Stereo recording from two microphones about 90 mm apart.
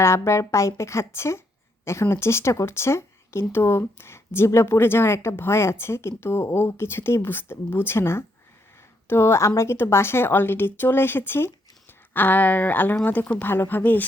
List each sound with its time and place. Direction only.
0.0 s a woman's voice: 30° left (ahead or behind)